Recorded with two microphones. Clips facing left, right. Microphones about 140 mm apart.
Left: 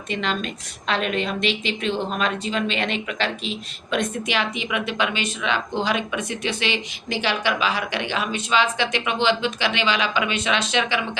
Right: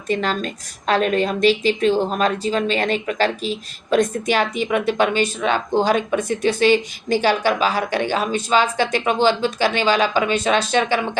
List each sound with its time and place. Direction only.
0.1 s a woman's voice: 40° right (ahead or behind)